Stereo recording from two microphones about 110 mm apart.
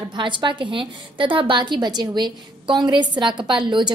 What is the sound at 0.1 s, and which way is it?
A woman's voice, 45° right (ahead or behind).